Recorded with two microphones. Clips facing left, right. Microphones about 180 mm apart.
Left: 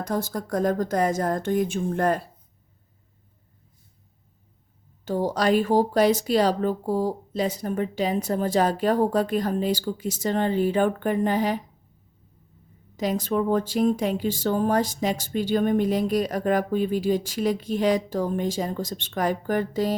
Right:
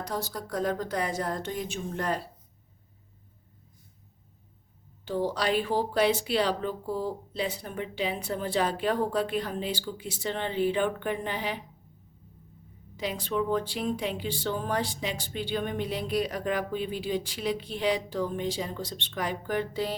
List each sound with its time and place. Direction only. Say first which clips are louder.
0.0 s speech: left 6 dB; 50° left (ahead or behind)
5.0 s speech: left 5 dB; 45° left (ahead or behind)
13.0 s speech: left 6 dB; 45° left (ahead or behind)